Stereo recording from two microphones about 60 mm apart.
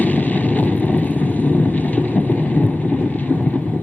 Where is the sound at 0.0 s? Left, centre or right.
Left.